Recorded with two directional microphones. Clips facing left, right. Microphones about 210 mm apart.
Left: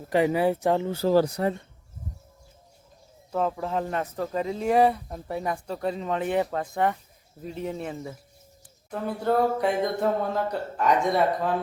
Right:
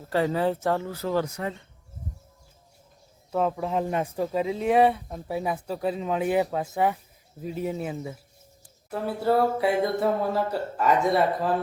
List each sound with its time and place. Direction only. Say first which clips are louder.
0.1 s speech: left 2 dB; 15° left (ahead or behind); by 1.5 s 35° left (ahead or behind)
3.3 s speech: right 1 dB; 5° right (ahead or behind)